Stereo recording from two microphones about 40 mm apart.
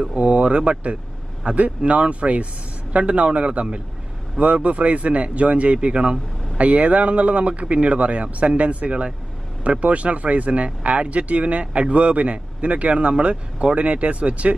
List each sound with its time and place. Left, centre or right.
0.0 s speech: right
6.6 s speech: right